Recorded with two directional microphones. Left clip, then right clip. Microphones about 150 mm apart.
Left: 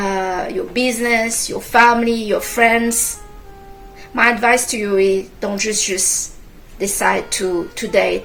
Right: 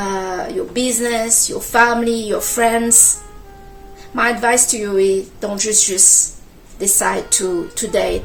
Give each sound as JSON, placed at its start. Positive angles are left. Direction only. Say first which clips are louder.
{"t": 0.0, "sound": "a woman's voice", "louder": "left 2 dB", "side_deg": -30}
{"t": 4.1, "sound": "a woman's voice", "louder": "left 2 dB", "side_deg": -25}